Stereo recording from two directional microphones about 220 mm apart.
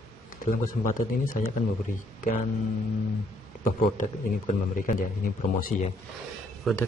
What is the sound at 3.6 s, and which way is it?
Speech, 35° left (ahead or behind).